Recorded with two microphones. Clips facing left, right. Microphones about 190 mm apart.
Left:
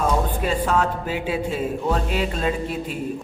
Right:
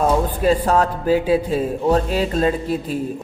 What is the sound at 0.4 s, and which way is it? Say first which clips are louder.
A man's voice: right 7 dB; 40° right (ahead or behind).